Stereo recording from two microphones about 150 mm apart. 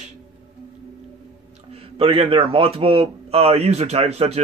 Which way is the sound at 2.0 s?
40° right (ahead or behind).